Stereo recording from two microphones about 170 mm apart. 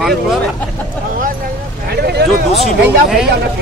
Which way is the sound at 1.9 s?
65° right (ahead or behind).